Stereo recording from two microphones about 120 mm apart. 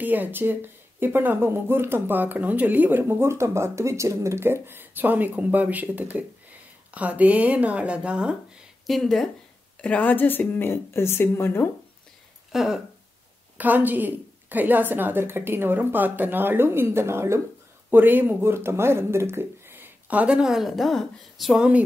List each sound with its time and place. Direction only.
0.0 s speech: 15° right (ahead or behind)
8.8 s a woman's voice: centre (ahead or behind); by 11.7 s 20° left (ahead or behind)
12.5 s speech: 5° right (ahead or behind)